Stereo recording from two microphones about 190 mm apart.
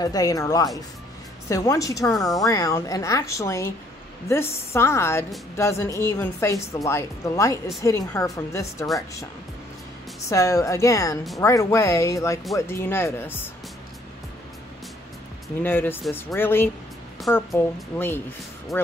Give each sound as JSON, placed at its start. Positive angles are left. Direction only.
{"t": 0.0, "sound": "a woman's voice", "side_deg": 20}
{"t": 10.3, "sound": "a woman's voice", "side_deg": 15}
{"t": 15.6, "sound": "a woman's voice", "side_deg": 10}